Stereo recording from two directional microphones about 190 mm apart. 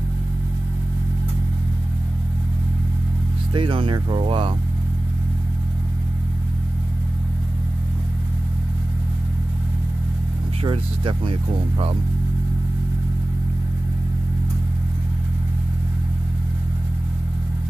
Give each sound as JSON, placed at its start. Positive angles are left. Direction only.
{"t": 3.5, "sound": "speech", "side_deg": -25}
{"t": 10.6, "sound": "speech", "side_deg": -25}